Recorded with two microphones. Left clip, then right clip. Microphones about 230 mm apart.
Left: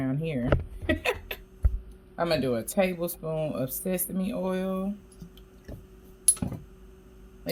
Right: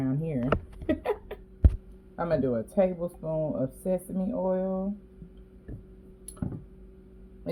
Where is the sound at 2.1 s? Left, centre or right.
Centre.